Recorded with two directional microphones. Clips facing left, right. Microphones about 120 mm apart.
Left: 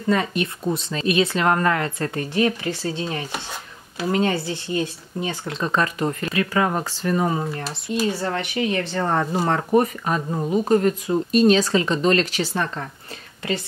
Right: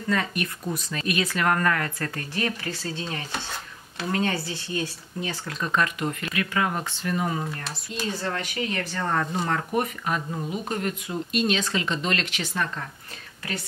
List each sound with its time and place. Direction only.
0.1 s speech: 25° left (ahead or behind)
8.2 s speech: 25° left (ahead or behind)